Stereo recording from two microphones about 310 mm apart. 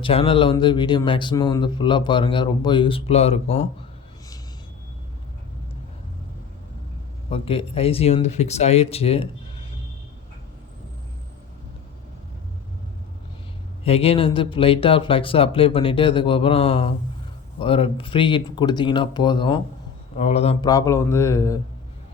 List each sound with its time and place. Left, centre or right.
0.0 s speech: centre
7.3 s speech: centre
13.8 s speech: centre